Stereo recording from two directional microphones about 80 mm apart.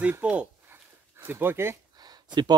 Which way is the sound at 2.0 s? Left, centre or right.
Right.